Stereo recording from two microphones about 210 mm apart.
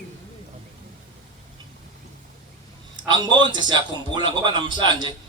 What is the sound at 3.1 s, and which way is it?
A man's voice, 20° right (ahead or behind).